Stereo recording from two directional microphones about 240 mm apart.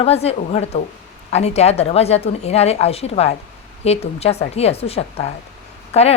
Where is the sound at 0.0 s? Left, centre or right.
Left.